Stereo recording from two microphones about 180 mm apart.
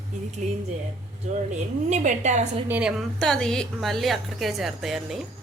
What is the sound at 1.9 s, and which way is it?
Speech, 40° right (ahead or behind).